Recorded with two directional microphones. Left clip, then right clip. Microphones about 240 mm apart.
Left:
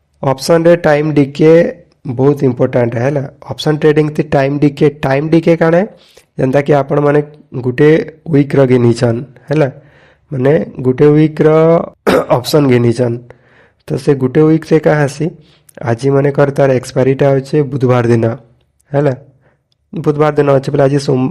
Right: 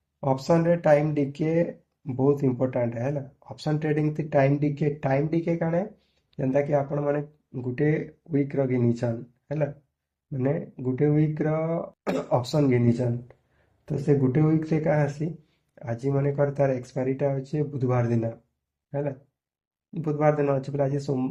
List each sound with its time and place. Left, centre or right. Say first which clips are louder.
0.2 s speech: left 13 dB; left
10.3 s speech: left 17 dB; left